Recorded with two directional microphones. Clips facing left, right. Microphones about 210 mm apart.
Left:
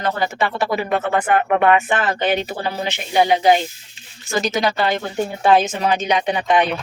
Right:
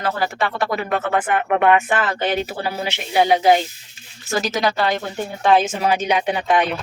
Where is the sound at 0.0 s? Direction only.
Centre (ahead or behind).